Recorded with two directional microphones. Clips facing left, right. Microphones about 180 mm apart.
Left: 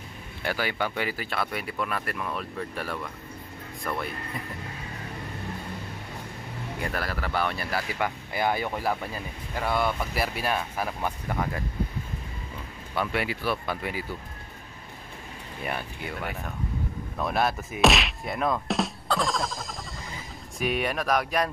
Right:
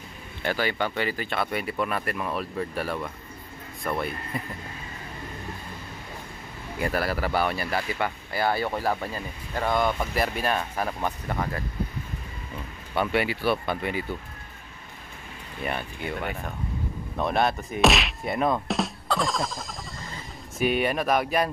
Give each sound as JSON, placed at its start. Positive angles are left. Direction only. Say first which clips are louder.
{"t": 0.4, "sound": "speech", "louder": "right 2 dB", "side_deg": 10}
{"t": 6.8, "sound": "speech", "louder": "right 6 dB", "side_deg": -5}
{"t": 8.0, "sound": "speech", "louder": "right 1 dB", "side_deg": 15}
{"t": 13.1, "sound": "speech", "louder": "right 6 dB", "side_deg": 0}
{"t": 15.6, "sound": "speech", "louder": "right 2 dB", "side_deg": 5}
{"t": 18.7, "sound": "music", "louder": "even", "side_deg": 0}
{"t": 20.5, "sound": "speech", "louder": "right 3 dB", "side_deg": 0}